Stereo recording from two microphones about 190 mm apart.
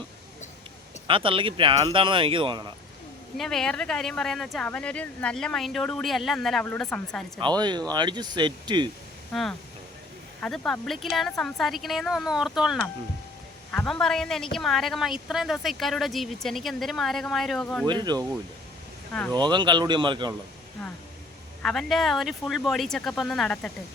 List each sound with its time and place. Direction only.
1.0 s speech: 25° right (ahead or behind)
3.3 s a woman's voice: centre (ahead or behind)
7.3 s speech: 25° right (ahead or behind)
9.3 s a woman's voice: centre (ahead or behind)
17.8 s speech: 20° right (ahead or behind)
19.3 s speech: 25° right (ahead or behind)
21.6 s a woman's voice: 5° left (ahead or behind)